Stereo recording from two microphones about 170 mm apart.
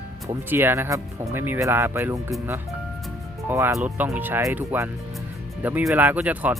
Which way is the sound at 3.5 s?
15° right (ahead or behind).